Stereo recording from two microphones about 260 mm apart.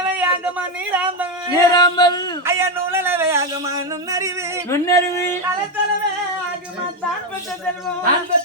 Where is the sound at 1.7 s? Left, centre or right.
Centre.